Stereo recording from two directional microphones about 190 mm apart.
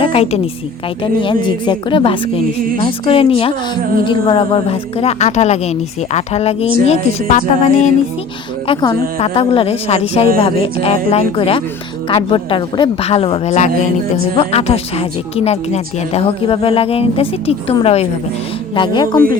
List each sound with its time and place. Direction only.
0.0 s a sound: 30° left (ahead or behind)
1.2 s a woman's voice: 25° left (ahead or behind)
8.6 s a woman's voice: 25° left (ahead or behind)